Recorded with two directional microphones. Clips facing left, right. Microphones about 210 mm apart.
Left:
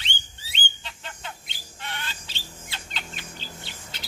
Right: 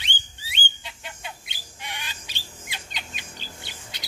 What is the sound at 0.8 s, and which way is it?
Squawk, 15° right (ahead or behind).